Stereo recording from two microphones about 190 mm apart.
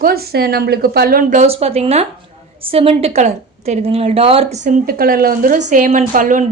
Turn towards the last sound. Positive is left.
turn(degrees=-45)  # may be behind; listen again after turning